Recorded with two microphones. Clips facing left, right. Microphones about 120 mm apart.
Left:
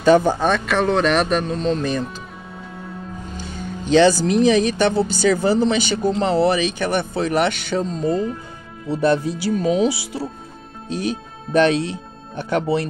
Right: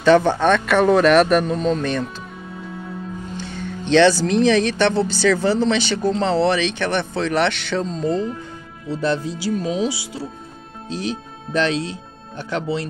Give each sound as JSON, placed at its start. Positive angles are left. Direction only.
{"t": 0.0, "sound": "speech", "side_deg": 10}
{"t": 1.8, "sound": "speech", "side_deg": 5}
{"t": 3.8, "sound": "speech", "side_deg": 5}
{"t": 8.8, "sound": "speech", "side_deg": 60}